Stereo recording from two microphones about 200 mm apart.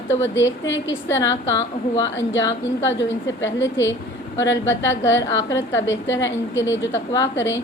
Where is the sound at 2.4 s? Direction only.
15° left (ahead or behind).